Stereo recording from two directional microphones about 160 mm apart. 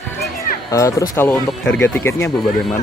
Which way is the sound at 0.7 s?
20° left (ahead or behind).